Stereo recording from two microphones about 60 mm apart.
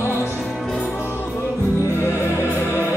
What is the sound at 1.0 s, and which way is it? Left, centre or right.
Music, left.